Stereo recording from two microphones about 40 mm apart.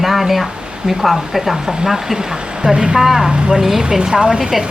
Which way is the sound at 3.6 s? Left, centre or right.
Centre.